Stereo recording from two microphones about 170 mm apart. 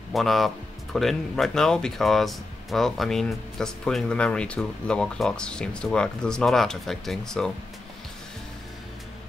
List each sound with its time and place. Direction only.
0.1 s speech: centre (ahead or behind)